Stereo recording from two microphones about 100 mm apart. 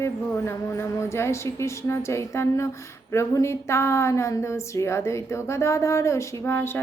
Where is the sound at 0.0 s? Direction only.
25° left (ahead or behind).